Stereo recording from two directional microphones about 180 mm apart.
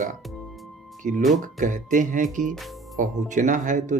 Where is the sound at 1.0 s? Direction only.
40° right (ahead or behind).